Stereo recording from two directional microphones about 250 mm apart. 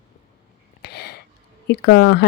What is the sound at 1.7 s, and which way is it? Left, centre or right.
Speech, left.